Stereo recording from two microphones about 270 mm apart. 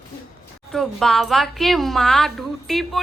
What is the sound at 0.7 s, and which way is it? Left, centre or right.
A woman's voice, centre.